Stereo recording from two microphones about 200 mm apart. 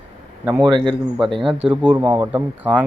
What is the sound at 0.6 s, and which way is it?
Speech, 20° right (ahead or behind).